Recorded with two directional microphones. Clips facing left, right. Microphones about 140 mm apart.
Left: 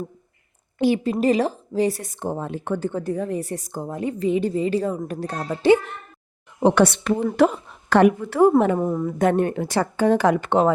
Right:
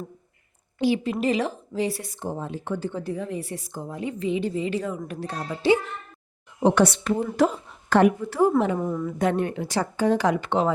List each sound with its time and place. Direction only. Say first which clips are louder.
1.0 s speech: left 4 dB; 40° left (ahead or behind)
6.6 s a woman's voice: left 3 dB; 65° left (ahead or behind)
8.8 s speech: left 4 dB; 35° left (ahead or behind)